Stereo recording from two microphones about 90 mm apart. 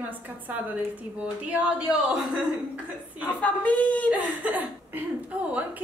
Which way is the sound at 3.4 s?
15° left (ahead or behind).